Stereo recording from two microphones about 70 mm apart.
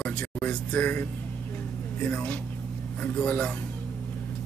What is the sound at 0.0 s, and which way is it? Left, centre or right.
Speech, centre.